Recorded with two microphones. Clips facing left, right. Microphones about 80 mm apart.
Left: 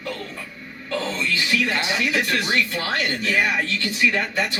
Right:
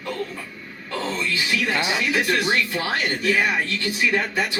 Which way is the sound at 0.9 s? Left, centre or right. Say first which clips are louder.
Left 1 dB; centre.